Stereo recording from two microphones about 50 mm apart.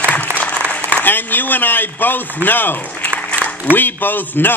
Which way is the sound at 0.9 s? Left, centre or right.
Left.